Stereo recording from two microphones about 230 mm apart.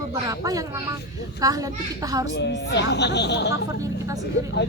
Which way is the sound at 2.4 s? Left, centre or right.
Left.